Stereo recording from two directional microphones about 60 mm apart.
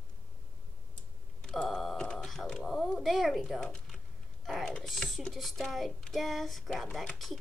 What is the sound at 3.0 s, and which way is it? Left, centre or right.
Speech, centre.